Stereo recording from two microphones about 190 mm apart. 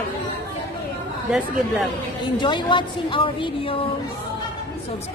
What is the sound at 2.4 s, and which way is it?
Speech, 25° left (ahead or behind).